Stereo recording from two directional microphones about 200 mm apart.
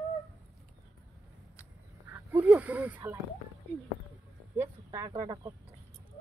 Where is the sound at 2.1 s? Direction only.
10° right (ahead or behind).